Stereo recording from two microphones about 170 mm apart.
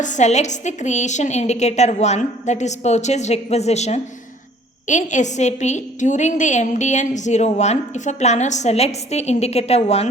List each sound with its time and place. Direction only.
0.0 s a woman's voice: 45° left (ahead or behind)